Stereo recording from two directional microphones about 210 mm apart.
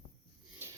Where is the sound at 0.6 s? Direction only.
10° right (ahead or behind).